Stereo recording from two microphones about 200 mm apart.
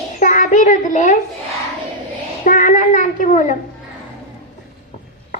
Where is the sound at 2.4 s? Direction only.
40° left (ahead or behind).